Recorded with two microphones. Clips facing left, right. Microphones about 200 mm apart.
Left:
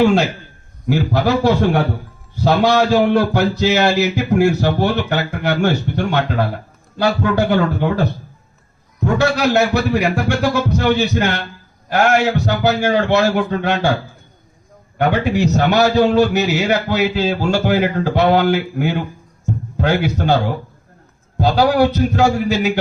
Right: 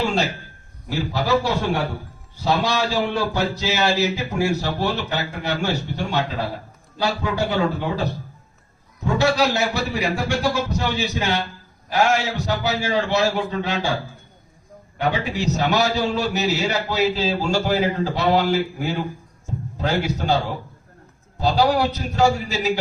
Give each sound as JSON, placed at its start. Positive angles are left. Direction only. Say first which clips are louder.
{"t": 0.0, "sound": "speech", "louder": "left 8 dB", "side_deg": 60}
{"t": 2.4, "sound": "speech", "louder": "left 7 dB", "side_deg": 60}
{"t": 9.0, "sound": "speech", "louder": "left 3 dB", "side_deg": 60}
{"t": 14.9, "sound": "speech", "louder": "left 7 dB", "side_deg": 60}